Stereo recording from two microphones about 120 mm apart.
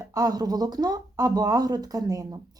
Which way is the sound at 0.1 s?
30° right (ahead or behind).